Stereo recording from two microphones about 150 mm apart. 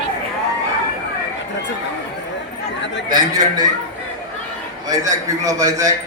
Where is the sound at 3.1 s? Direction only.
30° right (ahead or behind).